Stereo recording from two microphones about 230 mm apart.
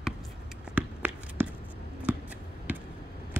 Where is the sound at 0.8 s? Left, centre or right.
Centre.